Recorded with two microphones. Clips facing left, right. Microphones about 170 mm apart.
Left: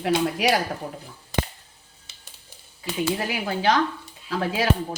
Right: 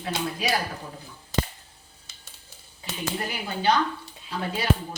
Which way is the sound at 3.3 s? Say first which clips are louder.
Right 1 dB; 90° left.